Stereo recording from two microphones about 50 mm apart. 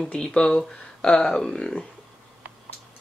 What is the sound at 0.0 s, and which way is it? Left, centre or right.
Speech, centre.